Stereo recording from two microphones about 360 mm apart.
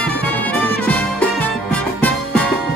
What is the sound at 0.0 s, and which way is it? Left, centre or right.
Music, centre.